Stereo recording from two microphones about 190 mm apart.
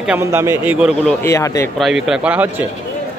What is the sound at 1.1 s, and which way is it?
Speech, 15° left (ahead or behind).